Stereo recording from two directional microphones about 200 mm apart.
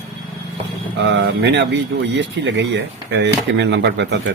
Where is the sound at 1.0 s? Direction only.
60° right (ahead or behind).